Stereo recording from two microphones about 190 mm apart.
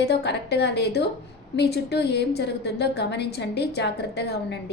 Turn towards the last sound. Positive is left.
turn(degrees=60)  # may be behind; listen again after turning